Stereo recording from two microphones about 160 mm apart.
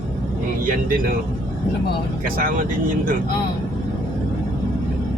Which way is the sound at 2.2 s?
65° right (ahead or behind).